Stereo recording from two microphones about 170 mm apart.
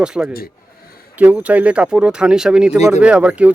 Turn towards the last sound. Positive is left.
turn(degrees=-10)  # may be behind; listen again after turning